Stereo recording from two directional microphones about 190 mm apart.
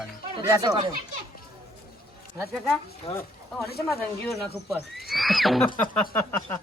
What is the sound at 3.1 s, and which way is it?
Speech, 15° left (ahead or behind).